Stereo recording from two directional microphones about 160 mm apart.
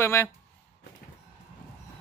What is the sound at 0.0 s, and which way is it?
Speech, 15° left (ahead or behind).